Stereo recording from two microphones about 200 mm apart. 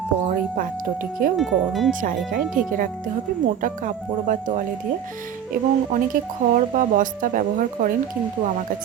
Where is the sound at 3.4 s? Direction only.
40° right (ahead or behind).